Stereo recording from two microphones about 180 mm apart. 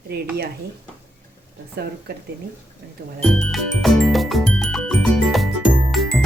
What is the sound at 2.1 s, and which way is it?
Speech, 60° right (ahead or behind).